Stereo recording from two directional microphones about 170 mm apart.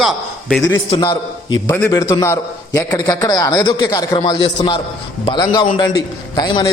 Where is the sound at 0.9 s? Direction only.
25° left (ahead or behind).